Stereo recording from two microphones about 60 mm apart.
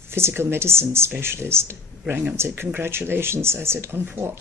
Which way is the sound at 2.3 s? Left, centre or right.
Right.